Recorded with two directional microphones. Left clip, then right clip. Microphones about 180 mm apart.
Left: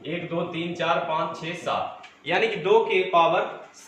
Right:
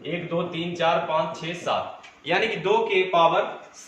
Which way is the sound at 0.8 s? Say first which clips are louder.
Right 2 dB; 15° right (ahead or behind).